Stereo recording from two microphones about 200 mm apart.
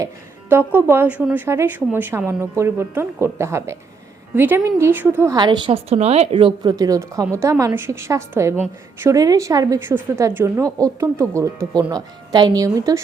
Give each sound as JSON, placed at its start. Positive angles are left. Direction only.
{"t": 0.7, "sound": "a woman's voice", "side_deg": -10}